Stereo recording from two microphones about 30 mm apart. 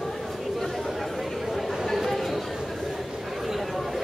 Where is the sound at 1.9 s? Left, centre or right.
Centre.